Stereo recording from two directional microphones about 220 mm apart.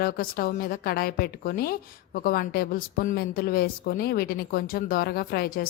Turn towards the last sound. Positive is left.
turn(degrees=45)  # may be behind; listen again after turning